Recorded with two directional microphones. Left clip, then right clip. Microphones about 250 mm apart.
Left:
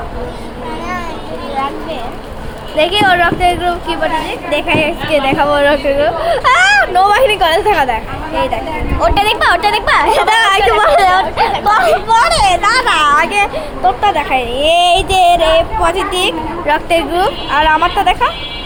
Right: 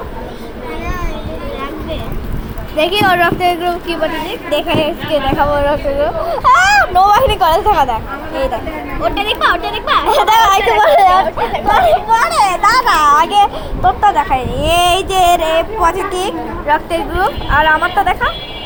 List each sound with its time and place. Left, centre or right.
2.7 s a child's voice: centre
5.1 s speech: centre
9.0 s speech: left
10.1 s a child's voice: centre
11.2 s speech: centre
12.4 s a child's voice: centre
16.6 s speech: centre